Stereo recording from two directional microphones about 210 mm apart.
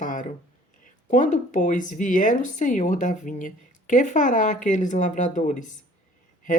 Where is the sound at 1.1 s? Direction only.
35° left (ahead or behind).